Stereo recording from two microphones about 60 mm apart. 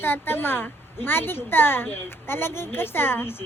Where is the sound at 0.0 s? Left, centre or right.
Left.